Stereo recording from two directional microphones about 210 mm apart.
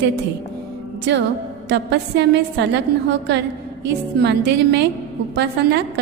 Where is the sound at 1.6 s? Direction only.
55° right (ahead or behind).